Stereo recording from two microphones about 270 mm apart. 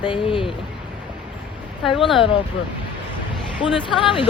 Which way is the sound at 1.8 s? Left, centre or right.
Centre.